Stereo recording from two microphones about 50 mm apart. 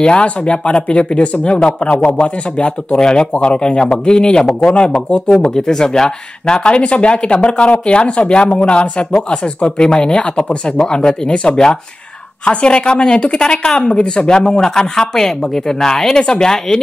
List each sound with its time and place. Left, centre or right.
0.0 s speech: left
2.5 s speech: centre